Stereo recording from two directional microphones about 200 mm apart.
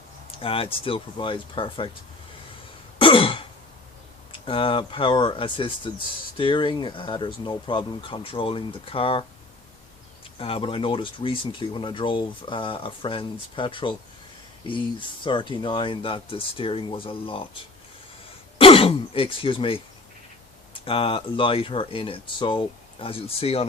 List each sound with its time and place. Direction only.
0.3 s speech: 30° left (ahead or behind)
3.0 s throat clearing: 25° left (ahead or behind)
4.3 s speech: 25° left (ahead or behind)
10.3 s speech: 25° left (ahead or behind)
20.8 s speech: 25° left (ahead or behind)